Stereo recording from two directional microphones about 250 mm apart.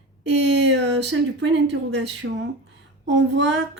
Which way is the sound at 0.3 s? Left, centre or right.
Right.